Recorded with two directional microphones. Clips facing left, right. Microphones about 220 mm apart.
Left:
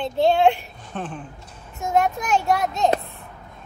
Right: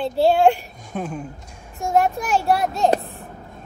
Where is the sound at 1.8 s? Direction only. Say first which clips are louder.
Right 2 dB; 35° right (ahead or behind).